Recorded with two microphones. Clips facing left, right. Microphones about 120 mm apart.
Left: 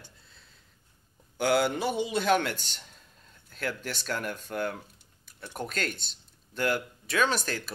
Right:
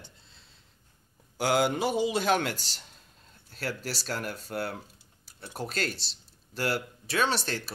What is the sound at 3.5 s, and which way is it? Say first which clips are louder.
Speech: even; 35° right (ahead or behind).